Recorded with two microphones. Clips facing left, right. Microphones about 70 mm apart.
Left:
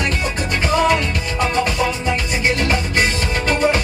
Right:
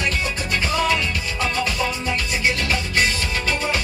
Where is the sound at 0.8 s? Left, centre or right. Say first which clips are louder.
Left 4 dB; left.